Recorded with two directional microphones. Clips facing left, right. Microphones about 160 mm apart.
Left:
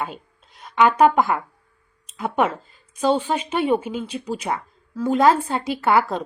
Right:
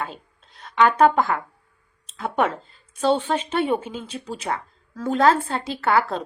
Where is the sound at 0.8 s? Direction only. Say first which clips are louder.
Left 1 dB; 15° left (ahead or behind).